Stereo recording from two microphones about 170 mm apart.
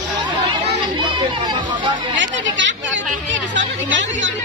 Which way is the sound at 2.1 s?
90° right.